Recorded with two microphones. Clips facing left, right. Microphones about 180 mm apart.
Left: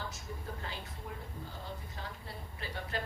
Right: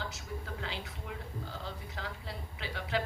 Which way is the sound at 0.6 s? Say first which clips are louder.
Right 2 dB; 90° right.